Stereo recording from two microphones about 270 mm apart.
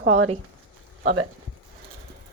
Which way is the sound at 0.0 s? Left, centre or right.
Right.